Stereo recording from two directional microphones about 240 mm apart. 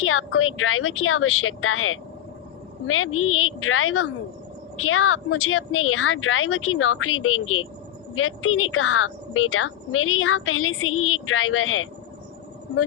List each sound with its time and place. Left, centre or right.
0.0 s a woman's voice: left